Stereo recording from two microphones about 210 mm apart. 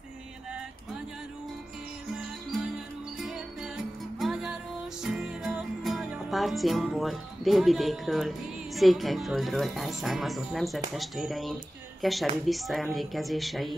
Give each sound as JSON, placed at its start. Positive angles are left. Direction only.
{"t": 3.2, "sound": "music", "side_deg": 0}
{"t": 8.7, "sound": "a woman's voice", "side_deg": 0}